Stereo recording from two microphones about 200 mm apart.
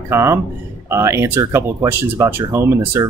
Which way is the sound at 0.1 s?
15° right (ahead or behind).